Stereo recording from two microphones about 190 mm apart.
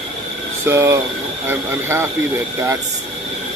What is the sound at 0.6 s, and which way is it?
Speech, 15° right (ahead or behind).